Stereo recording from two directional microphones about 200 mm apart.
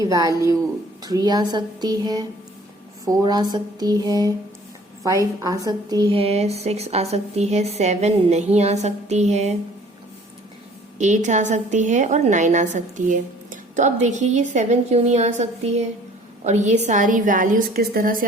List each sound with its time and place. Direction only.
0.0 s a woman's voice: 15° right (ahead or behind); by 9.6 s 35° right (ahead or behind)
10.9 s a woman's voice: 35° right (ahead or behind)